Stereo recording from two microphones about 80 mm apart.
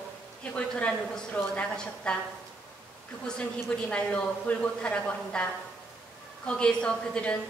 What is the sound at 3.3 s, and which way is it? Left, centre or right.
A woman's voice, centre.